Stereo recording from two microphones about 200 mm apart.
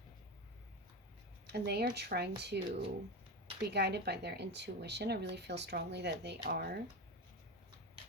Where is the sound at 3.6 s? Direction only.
55° right (ahead or behind).